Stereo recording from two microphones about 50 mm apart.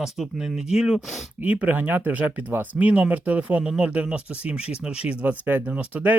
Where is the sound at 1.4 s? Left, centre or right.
Right.